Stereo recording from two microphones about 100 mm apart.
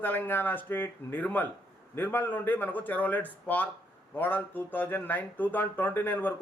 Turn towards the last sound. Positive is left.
turn(degrees=20)  # may be behind; listen again after turning